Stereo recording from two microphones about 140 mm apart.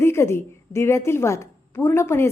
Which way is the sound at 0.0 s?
20° left (ahead or behind).